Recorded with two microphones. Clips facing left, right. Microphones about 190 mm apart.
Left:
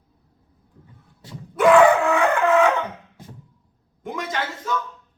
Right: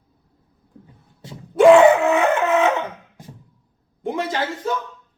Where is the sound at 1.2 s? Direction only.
25° right (ahead or behind).